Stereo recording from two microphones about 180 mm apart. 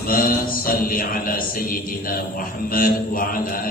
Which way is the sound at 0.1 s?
50° left (ahead or behind).